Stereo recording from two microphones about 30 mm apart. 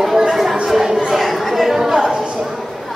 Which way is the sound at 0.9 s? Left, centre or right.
Centre.